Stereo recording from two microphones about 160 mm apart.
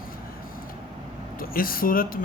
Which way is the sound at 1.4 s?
65° left (ahead or behind).